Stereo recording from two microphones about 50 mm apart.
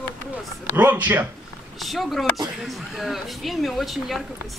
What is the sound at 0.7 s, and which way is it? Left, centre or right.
Speech, right.